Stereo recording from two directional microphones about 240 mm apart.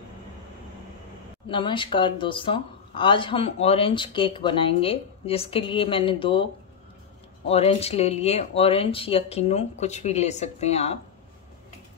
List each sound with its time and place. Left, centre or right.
1.5 s speech: centre